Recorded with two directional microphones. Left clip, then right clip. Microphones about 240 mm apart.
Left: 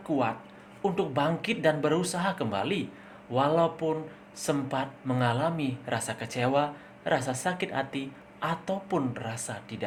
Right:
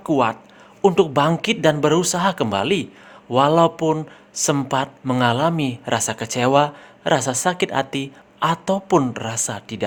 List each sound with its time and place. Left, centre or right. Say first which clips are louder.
0.1 s speech: right 10 dB; right